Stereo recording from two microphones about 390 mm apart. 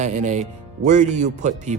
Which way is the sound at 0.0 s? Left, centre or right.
Centre.